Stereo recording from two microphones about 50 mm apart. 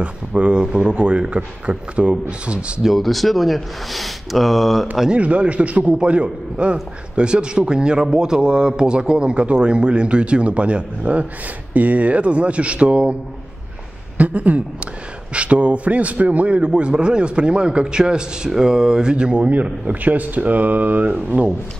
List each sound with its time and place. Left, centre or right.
0.0 s a man's voice: right
2.8 s speech: centre
5.1 s a man's voice: right
14.1 s a man's voice: right